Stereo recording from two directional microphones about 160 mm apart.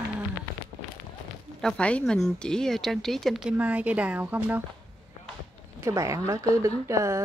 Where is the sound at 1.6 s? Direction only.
5° left (ahead or behind); by 4.6 s 10° right (ahead or behind).